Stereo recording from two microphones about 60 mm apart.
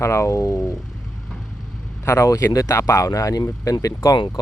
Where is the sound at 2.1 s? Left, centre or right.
Left.